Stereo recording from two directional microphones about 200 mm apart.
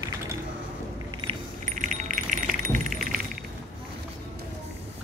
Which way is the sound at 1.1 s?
30° right (ahead or behind).